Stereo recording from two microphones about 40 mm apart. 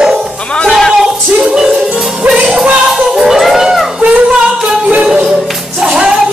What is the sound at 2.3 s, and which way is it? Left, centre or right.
Music, centre.